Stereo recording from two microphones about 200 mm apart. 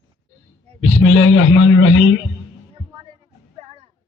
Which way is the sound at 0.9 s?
75° left (ahead or behind).